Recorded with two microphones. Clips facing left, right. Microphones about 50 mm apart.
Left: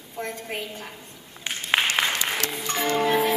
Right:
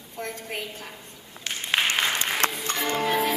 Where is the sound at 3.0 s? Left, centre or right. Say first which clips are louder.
Left 3 dB; centre.